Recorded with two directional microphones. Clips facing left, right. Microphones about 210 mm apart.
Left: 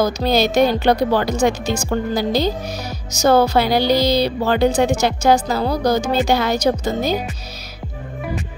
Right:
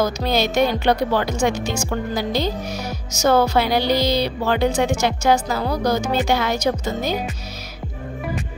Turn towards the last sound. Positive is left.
turn(degrees=35)  # may be behind; listen again after turning